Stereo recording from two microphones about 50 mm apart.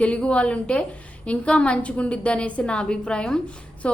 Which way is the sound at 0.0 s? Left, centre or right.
Left.